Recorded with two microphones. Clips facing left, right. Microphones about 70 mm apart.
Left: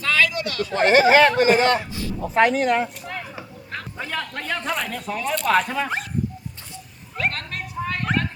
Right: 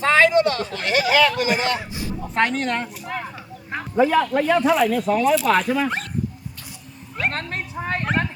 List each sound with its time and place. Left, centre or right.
0.0 s speech: right
0.7 s speech: left
1.8 s a man's voice: right
2.2 s speech: centre
3.7 s speech: centre
7.3 s a sound: right